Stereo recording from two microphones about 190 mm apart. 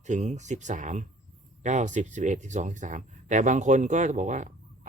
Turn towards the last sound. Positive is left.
turn(degrees=-40)  # may be behind; listen again after turning